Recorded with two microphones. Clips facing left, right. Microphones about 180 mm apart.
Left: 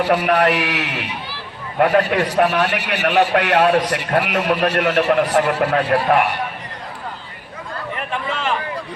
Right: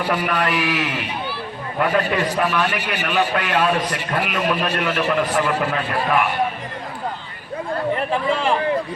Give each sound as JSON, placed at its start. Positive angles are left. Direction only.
{"t": 0.0, "sound": "a man's voice", "side_deg": 70}
{"t": 8.3, "sound": "a man's voice", "side_deg": -30}